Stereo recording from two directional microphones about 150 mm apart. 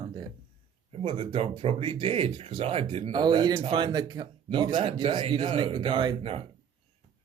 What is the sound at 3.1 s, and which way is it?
Speech, 30° right (ahead or behind).